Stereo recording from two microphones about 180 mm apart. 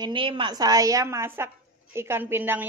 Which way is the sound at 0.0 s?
30° right (ahead or behind).